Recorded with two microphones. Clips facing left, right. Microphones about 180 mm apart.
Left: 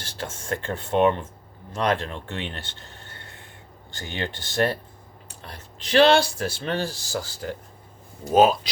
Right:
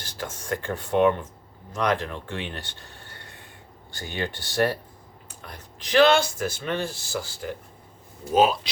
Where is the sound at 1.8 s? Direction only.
25° left (ahead or behind).